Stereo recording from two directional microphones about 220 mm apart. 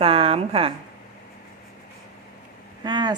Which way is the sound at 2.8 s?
20° right (ahead or behind).